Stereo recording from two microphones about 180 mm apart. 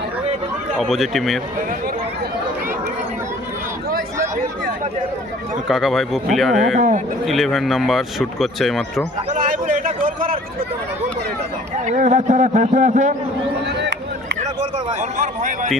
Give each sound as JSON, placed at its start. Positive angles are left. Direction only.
{"t": 0.8, "sound": "a man's voice", "side_deg": 0}
{"t": 5.6, "sound": "a man's voice", "side_deg": 0}
{"t": 6.7, "sound": "speech", "side_deg": -45}
{"t": 7.3, "sound": "a man's voice", "side_deg": 0}
{"t": 9.3, "sound": "a sound", "side_deg": -45}
{"t": 11.9, "sound": "speech", "side_deg": -40}
{"t": 13.7, "sound": "a sound", "side_deg": -70}
{"t": 15.2, "sound": "speech", "side_deg": -45}